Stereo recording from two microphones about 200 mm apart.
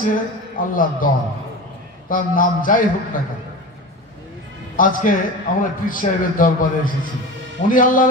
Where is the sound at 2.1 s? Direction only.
45° left (ahead or behind).